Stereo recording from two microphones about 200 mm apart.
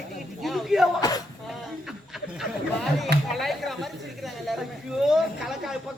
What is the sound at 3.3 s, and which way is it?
Speech, centre (ahead or behind).